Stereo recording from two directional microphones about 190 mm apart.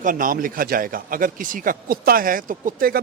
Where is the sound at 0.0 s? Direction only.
45° right (ahead or behind).